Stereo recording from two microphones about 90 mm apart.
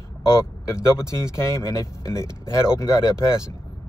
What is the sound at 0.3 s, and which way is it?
A man's voice, 30° left (ahead or behind).